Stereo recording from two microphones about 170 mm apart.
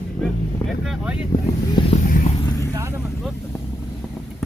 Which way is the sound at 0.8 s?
5° right (ahead or behind).